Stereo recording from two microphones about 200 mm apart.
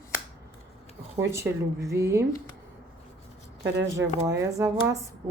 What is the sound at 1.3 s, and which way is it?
Speech, 15° right (ahead or behind).